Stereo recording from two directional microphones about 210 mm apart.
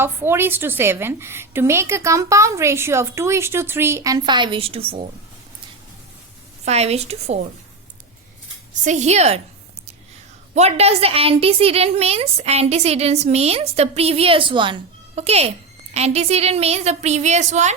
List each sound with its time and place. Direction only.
0.0 s a woman's voice: 10° right (ahead or behind); by 5.0 s 25° right (ahead or behind)
6.7 s a woman's voice: 30° right (ahead or behind)
8.8 s a woman's voice: 35° right (ahead or behind)
10.5 s a woman's voice: 30° right (ahead or behind)